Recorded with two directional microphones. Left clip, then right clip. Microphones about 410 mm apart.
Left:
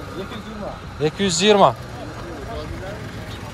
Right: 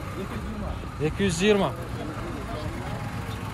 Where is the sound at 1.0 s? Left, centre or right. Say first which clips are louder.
Left 6 dB; centre.